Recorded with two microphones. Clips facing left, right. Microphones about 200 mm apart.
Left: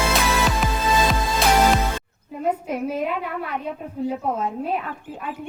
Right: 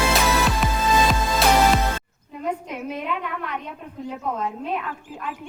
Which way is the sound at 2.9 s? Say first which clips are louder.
Left 3 dB; 40° left (ahead or behind).